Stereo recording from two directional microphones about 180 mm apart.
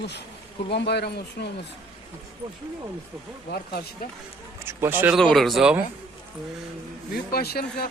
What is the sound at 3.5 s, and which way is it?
Speech, 60° left (ahead or behind).